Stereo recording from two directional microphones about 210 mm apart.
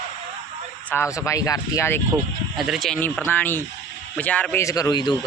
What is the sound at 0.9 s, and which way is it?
Speech, 15° left (ahead or behind).